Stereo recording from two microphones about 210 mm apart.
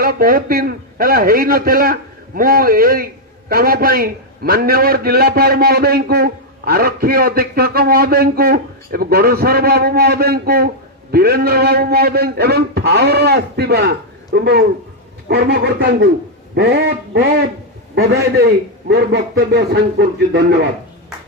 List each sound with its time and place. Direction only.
0.0 s a man's voice: 45° right (ahead or behind)